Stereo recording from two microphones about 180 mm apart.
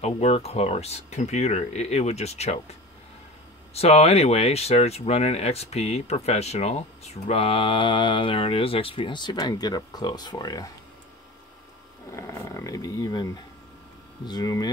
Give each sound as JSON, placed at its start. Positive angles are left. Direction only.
{"t": 0.0, "sound": "speech", "side_deg": 35}
{"t": 12.1, "sound": "a sound", "side_deg": 15}
{"t": 14.2, "sound": "speech", "side_deg": 20}